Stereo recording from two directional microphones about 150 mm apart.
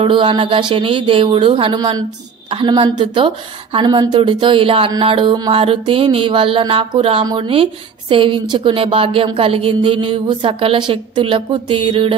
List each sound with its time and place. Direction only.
0.0 s a woman's voice: 35° right (ahead or behind)